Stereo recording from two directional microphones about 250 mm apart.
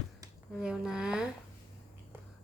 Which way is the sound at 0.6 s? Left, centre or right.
Centre.